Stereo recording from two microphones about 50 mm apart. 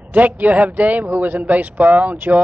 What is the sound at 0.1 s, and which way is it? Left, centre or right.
Speech, right.